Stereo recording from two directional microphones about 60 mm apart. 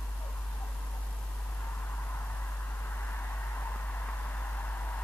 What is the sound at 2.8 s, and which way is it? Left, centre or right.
Vehicle, left.